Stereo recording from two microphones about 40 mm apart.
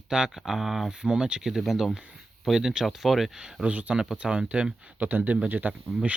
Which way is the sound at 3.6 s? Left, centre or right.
Right.